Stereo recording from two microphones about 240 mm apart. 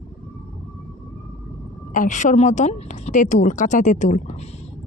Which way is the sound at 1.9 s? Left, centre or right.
Left.